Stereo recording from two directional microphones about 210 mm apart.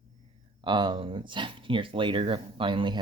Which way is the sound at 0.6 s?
20° right (ahead or behind).